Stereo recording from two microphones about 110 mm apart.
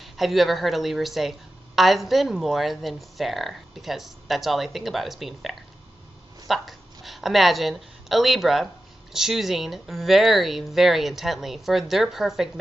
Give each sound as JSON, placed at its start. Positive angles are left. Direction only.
{"t": 0.0, "sound": "speech", "side_deg": 0}